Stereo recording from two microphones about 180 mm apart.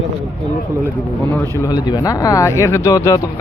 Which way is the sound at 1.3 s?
15° left (ahead or behind).